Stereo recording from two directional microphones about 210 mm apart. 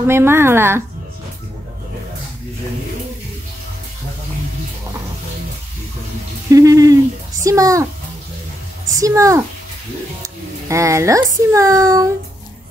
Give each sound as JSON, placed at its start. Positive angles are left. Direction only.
{"t": 0.0, "sound": "speech", "side_deg": -10}
{"t": 6.5, "sound": "speech", "side_deg": -15}
{"t": 8.9, "sound": "a child's voice", "side_deg": -15}